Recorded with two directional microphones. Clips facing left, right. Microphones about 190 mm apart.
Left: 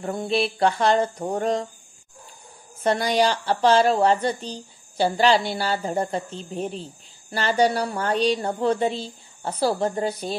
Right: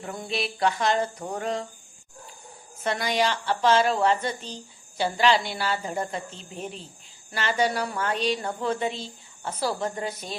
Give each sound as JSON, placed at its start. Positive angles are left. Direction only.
{"t": 0.0, "sound": "a woman's voice", "side_deg": 30}
{"t": 2.8, "sound": "a woman's voice", "side_deg": 35}